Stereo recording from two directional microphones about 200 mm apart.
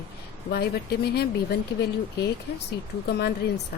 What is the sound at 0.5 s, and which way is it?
Speech, 50° left (ahead or behind).